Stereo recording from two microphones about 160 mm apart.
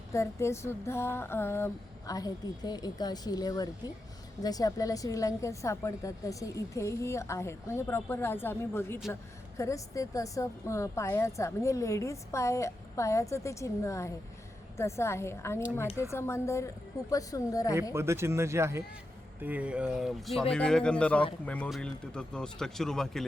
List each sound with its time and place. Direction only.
0.1 s a woman's voice: 20° left (ahead or behind)
17.9 s a woman's voice: 15° right (ahead or behind); by 23.2 s centre (ahead or behind)